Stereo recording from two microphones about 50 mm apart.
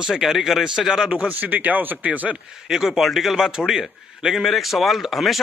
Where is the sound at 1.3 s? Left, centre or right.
Right.